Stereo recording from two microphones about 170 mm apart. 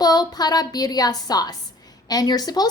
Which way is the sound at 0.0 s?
25° left (ahead or behind).